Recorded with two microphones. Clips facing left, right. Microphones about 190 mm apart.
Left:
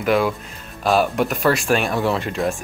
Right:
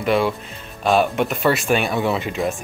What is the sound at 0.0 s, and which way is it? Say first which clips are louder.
Speech: even; centre (ahead or behind).